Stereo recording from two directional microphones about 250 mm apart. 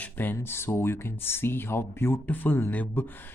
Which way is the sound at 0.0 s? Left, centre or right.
Centre.